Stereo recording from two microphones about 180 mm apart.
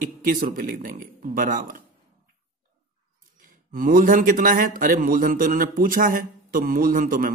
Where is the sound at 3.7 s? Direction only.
50° right (ahead or behind).